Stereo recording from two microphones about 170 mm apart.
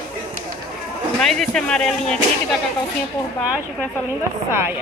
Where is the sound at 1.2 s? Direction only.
5° left (ahead or behind).